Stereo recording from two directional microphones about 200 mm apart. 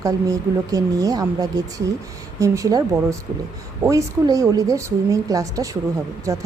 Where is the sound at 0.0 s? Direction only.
15° right (ahead or behind).